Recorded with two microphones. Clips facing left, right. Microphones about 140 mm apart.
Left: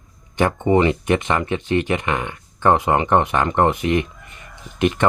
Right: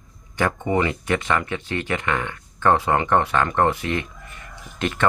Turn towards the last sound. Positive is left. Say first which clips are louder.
# left 5 dB
turn(degrees=15)  # may be behind; listen again after turning